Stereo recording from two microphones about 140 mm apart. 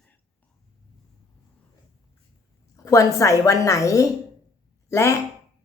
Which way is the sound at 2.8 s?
25° left (ahead or behind).